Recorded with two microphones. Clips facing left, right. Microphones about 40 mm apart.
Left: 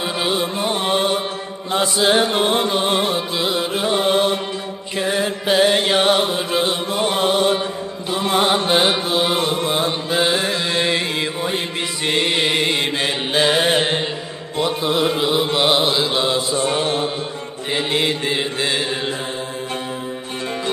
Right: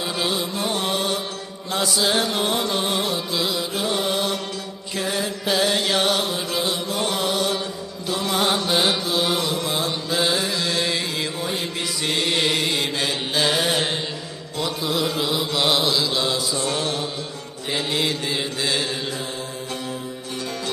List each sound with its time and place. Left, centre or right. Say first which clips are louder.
0.3 s music: left 4 dB; left
1.7 s chant: left 5 dB; left
7.0 s music: left 7 dB; left
8.1 s chant: left 4 dB; left
8.5 s music: left 4 dB; left
12.0 s mantra: left 3 dB; left
17.7 s chant: left 4 dB; left